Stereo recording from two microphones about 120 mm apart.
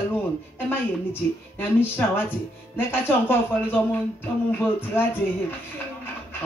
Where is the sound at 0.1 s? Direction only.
15° left (ahead or behind).